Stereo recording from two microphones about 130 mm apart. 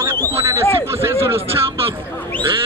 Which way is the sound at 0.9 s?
20° right (ahead or behind).